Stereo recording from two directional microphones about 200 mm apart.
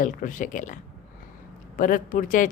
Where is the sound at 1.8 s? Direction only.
40° left (ahead or behind).